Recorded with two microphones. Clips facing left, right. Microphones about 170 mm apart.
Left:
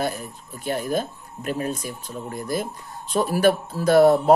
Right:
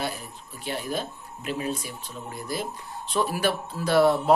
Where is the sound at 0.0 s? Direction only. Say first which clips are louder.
Left 5 dB; 50° left (ahead or behind).